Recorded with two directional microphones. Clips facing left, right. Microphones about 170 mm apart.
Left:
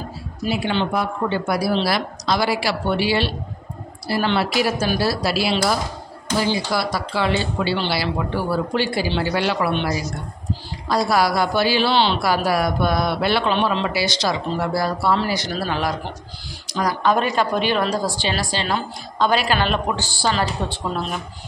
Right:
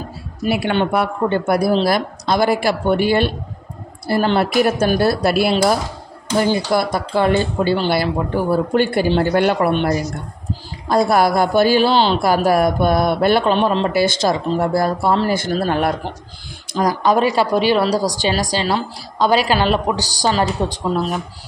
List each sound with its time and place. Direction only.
0.5 s a woman's voice: 60° right (ahead or behind)
17.2 s a woman's voice: 10° right (ahead or behind)
18.0 s speech: 40° right (ahead or behind)